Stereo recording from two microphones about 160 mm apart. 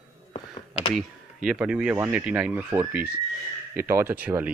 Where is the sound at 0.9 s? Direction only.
5° right (ahead or behind).